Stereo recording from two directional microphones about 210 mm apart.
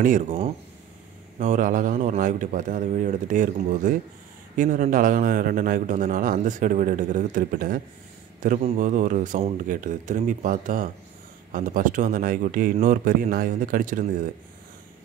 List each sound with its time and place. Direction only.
0.0 s speech: 40° right (ahead or behind)
1.4 s speech: 35° right (ahead or behind)